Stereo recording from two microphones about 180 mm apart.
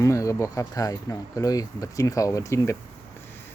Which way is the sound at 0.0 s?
15° left (ahead or behind).